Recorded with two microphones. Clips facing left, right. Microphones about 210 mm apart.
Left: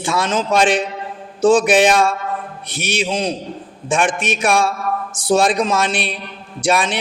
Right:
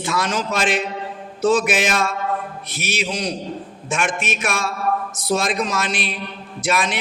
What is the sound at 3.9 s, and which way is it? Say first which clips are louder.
Mantra: left 5 dB; 30° left (ahead or behind).